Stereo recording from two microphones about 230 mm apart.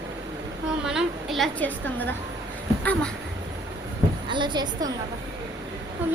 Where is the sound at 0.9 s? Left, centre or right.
Centre.